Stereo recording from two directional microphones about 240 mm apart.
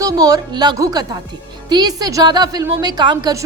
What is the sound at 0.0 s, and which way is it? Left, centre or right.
A woman's voice, centre.